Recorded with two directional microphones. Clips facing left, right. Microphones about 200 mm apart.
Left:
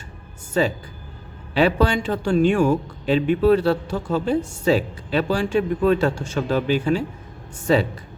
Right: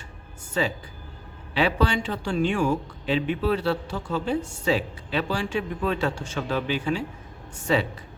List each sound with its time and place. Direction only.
0.6 s speech: 45° left (ahead or behind)